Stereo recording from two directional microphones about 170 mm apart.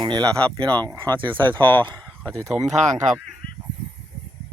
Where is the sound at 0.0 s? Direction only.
25° right (ahead or behind).